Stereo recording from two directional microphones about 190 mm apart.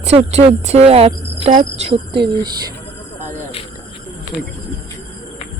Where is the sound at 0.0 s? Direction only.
35° right (ahead or behind).